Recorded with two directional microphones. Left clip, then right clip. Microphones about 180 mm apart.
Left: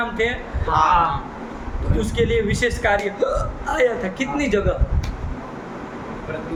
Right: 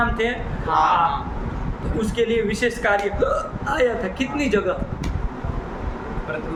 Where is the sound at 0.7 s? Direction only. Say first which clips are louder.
Even; 20° right (ahead or behind).